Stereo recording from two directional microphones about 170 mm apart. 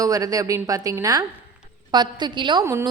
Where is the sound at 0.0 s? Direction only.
20° right (ahead or behind).